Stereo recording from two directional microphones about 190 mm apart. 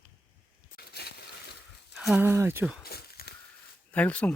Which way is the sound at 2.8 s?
55° left (ahead or behind).